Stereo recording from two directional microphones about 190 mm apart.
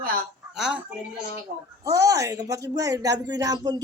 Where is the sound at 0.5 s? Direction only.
Centre (ahead or behind).